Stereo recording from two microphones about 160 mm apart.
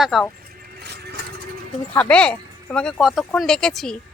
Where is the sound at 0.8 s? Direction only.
90° right.